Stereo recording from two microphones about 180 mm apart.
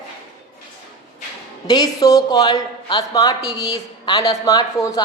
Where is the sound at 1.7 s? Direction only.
20° left (ahead or behind).